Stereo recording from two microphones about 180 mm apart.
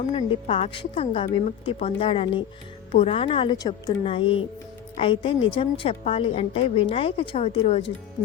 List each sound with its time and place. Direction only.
0.1 s a woman's voice: 35° left (ahead or behind)